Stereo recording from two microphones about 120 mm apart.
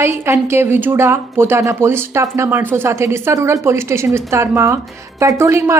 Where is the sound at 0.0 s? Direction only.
20° right (ahead or behind).